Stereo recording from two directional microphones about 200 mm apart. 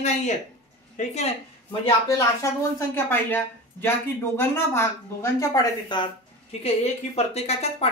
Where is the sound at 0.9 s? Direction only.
30° left (ahead or behind).